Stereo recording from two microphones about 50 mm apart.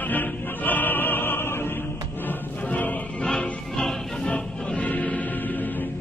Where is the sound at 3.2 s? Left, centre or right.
Centre.